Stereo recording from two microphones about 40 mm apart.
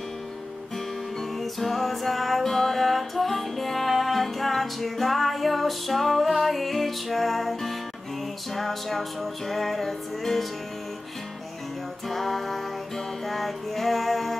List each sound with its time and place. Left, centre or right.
1.4 s music: centre
12.1 s music: centre